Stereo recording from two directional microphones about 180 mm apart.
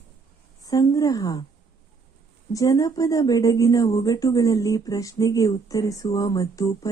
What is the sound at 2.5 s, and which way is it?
Speech, 20° left (ahead or behind).